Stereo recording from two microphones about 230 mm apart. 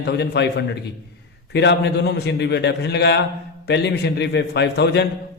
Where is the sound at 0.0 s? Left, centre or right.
Left.